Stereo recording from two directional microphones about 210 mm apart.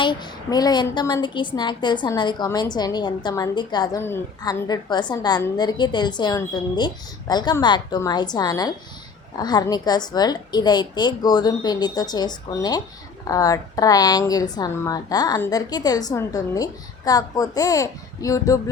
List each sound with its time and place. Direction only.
0.0 s a woman's voice: 20° left (ahead or behind)